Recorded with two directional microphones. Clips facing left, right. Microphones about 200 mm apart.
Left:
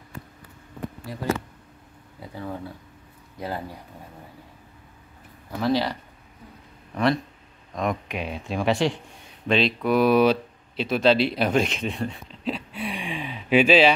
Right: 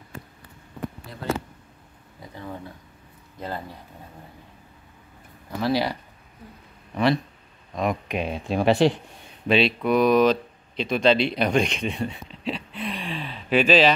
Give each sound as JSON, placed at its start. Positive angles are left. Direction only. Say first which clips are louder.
{"t": 2.1, "sound": "speech", "louder": "left 3 dB", "side_deg": 10}
{"t": 5.6, "sound": "speech", "louder": "even", "side_deg": -10}
{"t": 7.7, "sound": "speech", "louder": "right 1 dB", "side_deg": -5}
{"t": 8.1, "sound": "speech", "louder": "right 4 dB", "side_deg": -25}
{"t": 9.5, "sound": "speech", "louder": "right 1 dB", "side_deg": -5}